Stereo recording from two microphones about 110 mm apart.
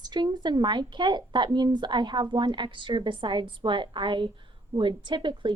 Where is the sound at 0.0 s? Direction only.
40° right (ahead or behind).